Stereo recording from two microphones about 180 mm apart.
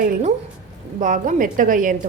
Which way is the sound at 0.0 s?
40° right (ahead or behind).